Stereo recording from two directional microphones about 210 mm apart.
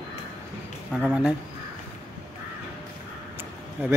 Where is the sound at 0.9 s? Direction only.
5° right (ahead or behind).